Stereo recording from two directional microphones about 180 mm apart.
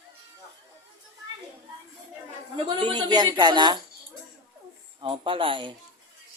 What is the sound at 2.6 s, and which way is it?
A woman's voice, 25° right (ahead or behind).